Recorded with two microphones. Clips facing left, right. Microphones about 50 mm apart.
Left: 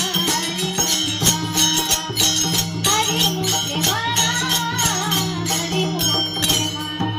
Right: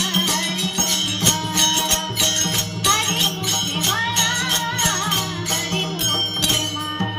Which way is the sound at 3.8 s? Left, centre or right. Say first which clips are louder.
Right 1 dB; right.